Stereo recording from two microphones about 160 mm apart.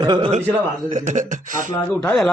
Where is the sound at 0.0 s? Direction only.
30° right (ahead or behind).